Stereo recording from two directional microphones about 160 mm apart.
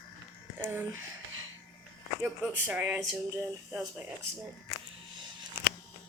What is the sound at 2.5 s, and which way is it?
Speech, 10° right (ahead or behind).